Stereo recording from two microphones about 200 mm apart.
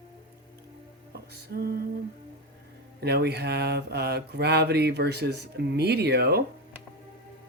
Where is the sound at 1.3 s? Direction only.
50° right (ahead or behind).